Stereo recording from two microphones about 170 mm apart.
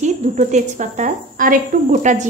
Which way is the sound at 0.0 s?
45° right (ahead or behind).